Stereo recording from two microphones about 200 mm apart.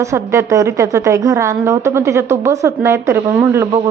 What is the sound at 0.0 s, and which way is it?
A woman's voice, 15° right (ahead or behind).